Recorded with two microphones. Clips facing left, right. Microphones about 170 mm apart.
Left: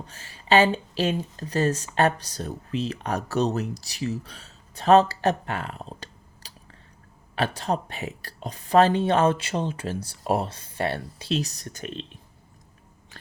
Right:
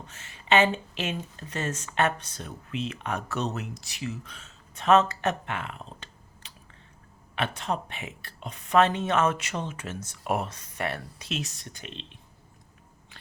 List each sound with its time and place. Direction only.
0.0 s speech: 35° left (ahead or behind)